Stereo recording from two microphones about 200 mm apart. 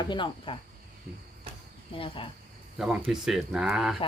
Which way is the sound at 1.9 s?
25° left (ahead or behind).